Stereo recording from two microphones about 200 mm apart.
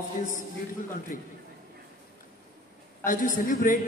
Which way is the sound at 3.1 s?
40° left (ahead or behind).